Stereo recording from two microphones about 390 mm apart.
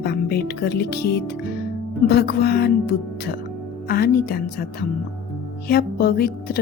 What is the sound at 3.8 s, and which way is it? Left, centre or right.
Speech, left.